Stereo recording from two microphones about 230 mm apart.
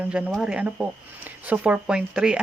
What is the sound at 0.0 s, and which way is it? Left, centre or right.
Speech, centre.